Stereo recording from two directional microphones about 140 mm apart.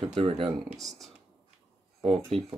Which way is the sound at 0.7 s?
Centre (ahead or behind).